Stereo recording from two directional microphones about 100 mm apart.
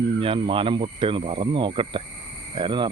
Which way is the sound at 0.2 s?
60° right (ahead or behind).